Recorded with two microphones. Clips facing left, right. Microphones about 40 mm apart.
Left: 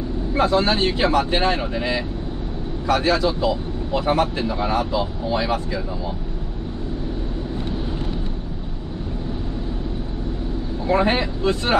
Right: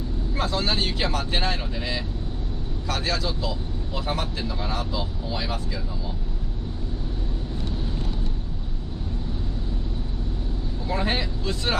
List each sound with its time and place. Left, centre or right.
0.3 s speech: left
10.9 s speech: left